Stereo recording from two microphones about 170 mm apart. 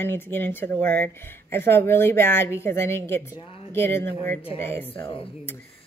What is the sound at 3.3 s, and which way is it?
Speech, 35° left (ahead or behind).